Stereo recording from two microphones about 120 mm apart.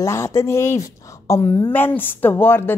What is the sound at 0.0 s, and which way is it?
A woman's voice, 25° left (ahead or behind).